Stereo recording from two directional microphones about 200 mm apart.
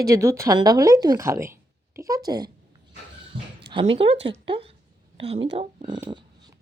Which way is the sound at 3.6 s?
25° right (ahead or behind).